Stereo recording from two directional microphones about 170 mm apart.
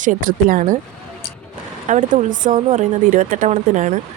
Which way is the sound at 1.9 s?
50° right (ahead or behind).